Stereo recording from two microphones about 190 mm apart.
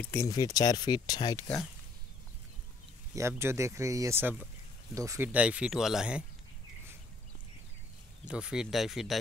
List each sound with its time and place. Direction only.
0.0 s speech: 15° left (ahead or behind)
3.2 s speech: 15° right (ahead or behind)
8.3 s speech: 5° right (ahead or behind)